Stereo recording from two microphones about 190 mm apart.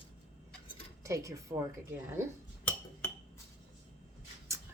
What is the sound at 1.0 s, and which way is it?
Speech, 15° right (ahead or behind).